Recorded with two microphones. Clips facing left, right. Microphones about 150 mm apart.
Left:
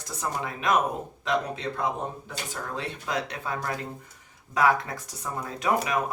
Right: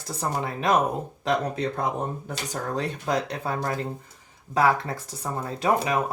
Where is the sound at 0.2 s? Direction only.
35° right (ahead or behind).